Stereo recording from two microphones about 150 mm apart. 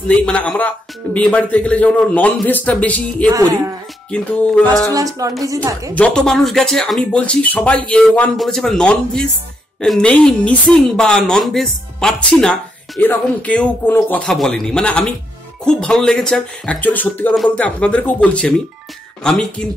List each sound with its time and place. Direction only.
0.1 s a man's voice: 10° left (ahead or behind)
4.9 s a woman's voice: 25° right (ahead or behind)
5.9 s a man's voice: 5° left (ahead or behind)